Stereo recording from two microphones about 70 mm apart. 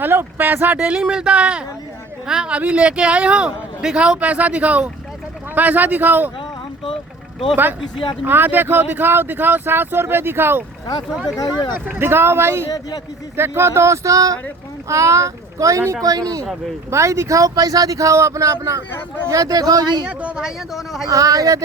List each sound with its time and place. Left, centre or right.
0.0 s speech: right
0.9 s speech: centre
7.5 s speech: right
11.3 s speech: left
11.9 s speech: right
16.0 s speech: right
16.9 s speech: right
20.1 s speech: centre
21.1 s speech: right